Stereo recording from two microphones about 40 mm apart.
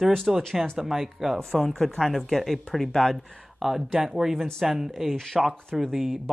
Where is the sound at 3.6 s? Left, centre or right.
Centre.